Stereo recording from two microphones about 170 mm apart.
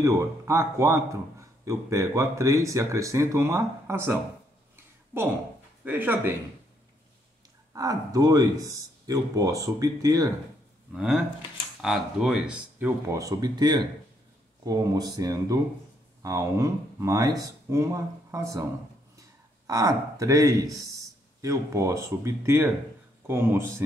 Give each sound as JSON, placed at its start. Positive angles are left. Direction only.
{"t": 0.0, "sound": "a man's voice", "side_deg": -15}
{"t": 5.9, "sound": "a man's voice", "side_deg": -10}
{"t": 7.7, "sound": "speech", "side_deg": -20}
{"t": 10.9, "sound": "a man's voice", "side_deg": -5}